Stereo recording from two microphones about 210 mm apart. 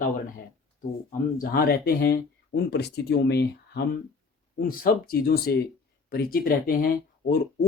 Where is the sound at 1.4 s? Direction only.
45° left (ahead or behind).